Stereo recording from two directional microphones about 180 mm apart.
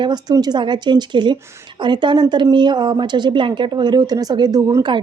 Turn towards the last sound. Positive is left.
turn(degrees=-20)  # may be behind; listen again after turning